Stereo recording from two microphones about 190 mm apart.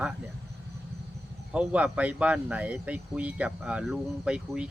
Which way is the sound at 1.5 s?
5° right (ahead or behind).